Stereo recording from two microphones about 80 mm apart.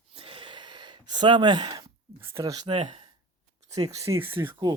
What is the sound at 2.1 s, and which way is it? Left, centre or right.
Speech, right.